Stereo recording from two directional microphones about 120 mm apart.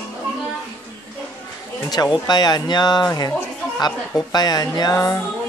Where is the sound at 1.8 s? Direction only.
35° left (ahead or behind).